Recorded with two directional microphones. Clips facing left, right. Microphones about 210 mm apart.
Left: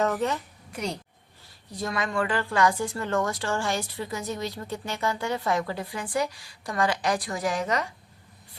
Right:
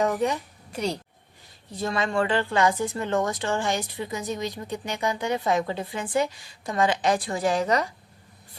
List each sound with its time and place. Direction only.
0.0 s a woman's voice: 15° right (ahead or behind)
0.7 s a woman's voice: 30° right (ahead or behind)